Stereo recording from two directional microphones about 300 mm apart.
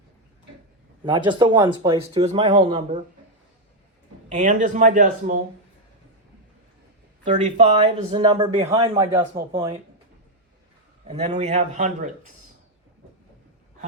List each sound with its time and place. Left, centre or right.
1.0 s speech: centre
4.3 s a man's voice: right
7.3 s speech: right
11.0 s a man's voice: right